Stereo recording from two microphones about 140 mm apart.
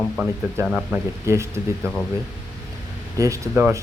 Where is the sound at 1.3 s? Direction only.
20° right (ahead or behind).